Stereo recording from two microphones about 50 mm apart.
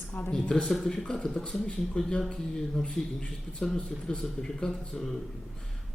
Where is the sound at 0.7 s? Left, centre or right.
Centre.